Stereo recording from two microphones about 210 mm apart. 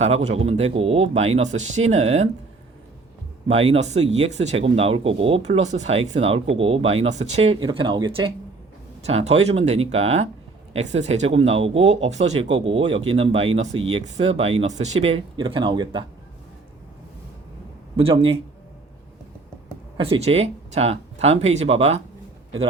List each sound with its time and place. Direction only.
0.0 s speech: 30° right (ahead or behind)
3.5 s speech: 30° right (ahead or behind)
17.9 s speech: 25° right (ahead or behind)
20.0 s speech: 30° right (ahead or behind)